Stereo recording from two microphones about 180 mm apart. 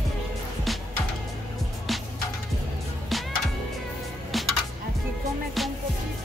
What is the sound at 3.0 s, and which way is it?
Music, centre (ahead or behind).